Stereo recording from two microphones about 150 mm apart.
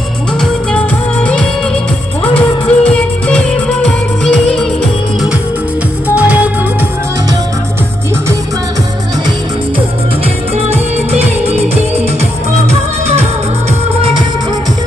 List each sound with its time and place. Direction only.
2.3 s music: 10° left (ahead or behind)
6.1 s music: 10° right (ahead or behind)
10.7 s music: 45° right (ahead or behind)